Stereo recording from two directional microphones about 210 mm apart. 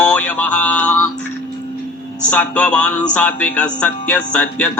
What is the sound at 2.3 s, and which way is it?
A man's voice, 5° left (ahead or behind).